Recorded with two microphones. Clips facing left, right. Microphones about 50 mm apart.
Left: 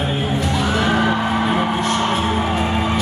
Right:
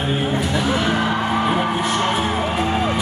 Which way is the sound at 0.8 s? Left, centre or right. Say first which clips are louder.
Left 2 dB; centre.